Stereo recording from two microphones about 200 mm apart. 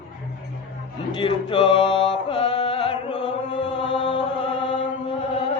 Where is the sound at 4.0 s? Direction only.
25° left (ahead or behind).